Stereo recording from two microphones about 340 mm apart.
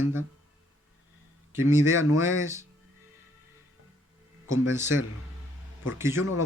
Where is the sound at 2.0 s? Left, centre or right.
Left.